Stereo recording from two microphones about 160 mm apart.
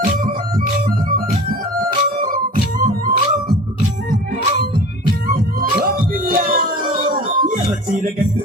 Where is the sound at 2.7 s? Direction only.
60° right (ahead or behind).